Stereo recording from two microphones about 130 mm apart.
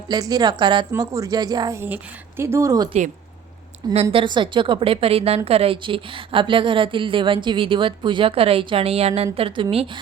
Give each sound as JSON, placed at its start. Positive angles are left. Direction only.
{"t": 0.1, "sound": "a woman's voice", "side_deg": -30}
{"t": 0.9, "sound": "speech", "side_deg": -25}
{"t": 1.8, "sound": "speech", "side_deg": -15}
{"t": 4.1, "sound": "a woman's voice", "side_deg": -40}